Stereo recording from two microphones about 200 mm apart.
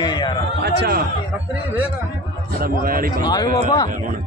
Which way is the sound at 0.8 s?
50° right (ahead or behind).